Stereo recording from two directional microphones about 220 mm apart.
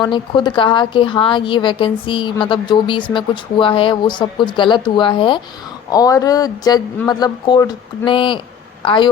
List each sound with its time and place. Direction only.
0.0 s a woman's voice: 20° left (ahead or behind)